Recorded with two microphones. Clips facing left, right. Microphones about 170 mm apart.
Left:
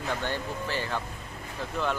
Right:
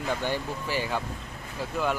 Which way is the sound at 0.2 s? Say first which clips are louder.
Right 2 dB; 10° right (ahead or behind).